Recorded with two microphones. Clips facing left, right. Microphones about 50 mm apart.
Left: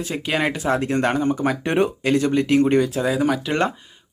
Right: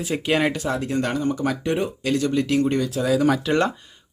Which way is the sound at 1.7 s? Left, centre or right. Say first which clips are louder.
Left 5 dB; left.